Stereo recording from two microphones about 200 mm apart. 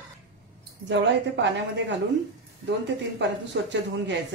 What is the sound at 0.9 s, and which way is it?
Speech, 65° right (ahead or behind).